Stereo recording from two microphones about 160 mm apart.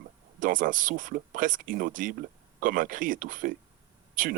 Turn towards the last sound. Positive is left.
turn(degrees=-55)  # may be behind; listen again after turning